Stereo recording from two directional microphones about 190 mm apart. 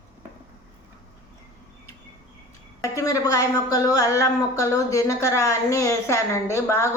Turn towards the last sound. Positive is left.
turn(degrees=15)  # may be behind; listen again after turning